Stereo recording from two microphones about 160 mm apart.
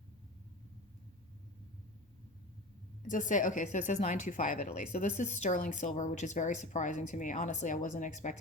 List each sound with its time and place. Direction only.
3.1 s speech: 55° left (ahead or behind)